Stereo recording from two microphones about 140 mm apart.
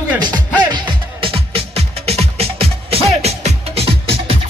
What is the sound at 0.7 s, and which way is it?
Music, 40° right (ahead or behind).